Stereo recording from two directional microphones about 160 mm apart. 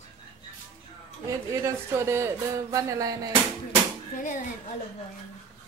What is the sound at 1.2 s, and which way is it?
Speech, 20° right (ahead or behind).